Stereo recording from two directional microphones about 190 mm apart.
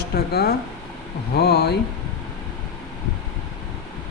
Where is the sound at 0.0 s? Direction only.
55° left (ahead or behind).